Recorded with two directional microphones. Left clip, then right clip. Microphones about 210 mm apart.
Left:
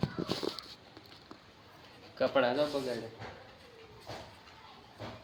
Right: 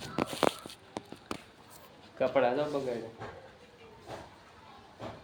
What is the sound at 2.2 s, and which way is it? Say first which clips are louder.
Speech: right 1 dB; 5° left (ahead or behind).